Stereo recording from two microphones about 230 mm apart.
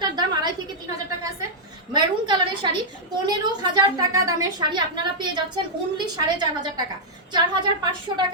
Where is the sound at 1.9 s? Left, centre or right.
Centre.